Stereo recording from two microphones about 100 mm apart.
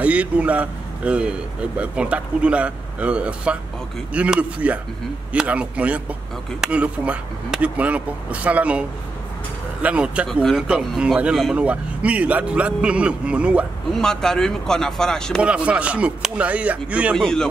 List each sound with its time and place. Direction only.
0.0 s speech: 15° right (ahead or behind)
10.2 s speech: centre (ahead or behind)
13.9 s speech: 5° left (ahead or behind)
15.4 s speech: 10° right (ahead or behind)
17.1 s speech: 5° left (ahead or behind)